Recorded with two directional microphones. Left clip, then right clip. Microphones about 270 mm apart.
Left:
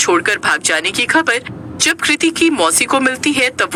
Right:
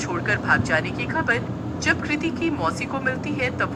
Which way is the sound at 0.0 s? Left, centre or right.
Left.